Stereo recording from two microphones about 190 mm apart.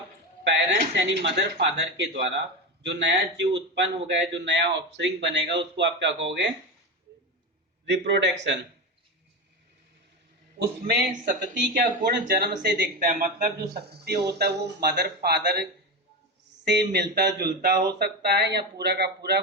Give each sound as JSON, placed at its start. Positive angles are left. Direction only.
{"t": 0.4, "sound": "speech", "side_deg": -70}
{"t": 2.8, "sound": "speech", "side_deg": -65}
{"t": 7.9, "sound": "speech", "side_deg": -65}
{"t": 10.6, "sound": "speech", "side_deg": -50}
{"t": 11.7, "sound": "speech", "side_deg": -55}
{"t": 13.1, "sound": "speech", "side_deg": -45}